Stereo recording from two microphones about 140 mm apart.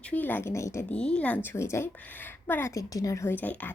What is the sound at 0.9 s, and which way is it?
A woman's voice, 5° left (ahead or behind).